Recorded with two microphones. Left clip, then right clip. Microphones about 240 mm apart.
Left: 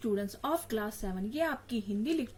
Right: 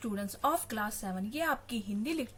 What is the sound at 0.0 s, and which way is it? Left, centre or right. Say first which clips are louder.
A woman's voice: right 1 dB; right.